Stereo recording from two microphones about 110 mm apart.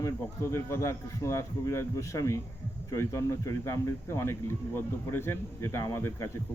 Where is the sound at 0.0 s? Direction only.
25° left (ahead or behind).